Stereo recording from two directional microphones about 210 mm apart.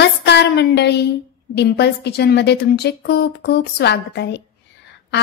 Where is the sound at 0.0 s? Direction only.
55° left (ahead or behind).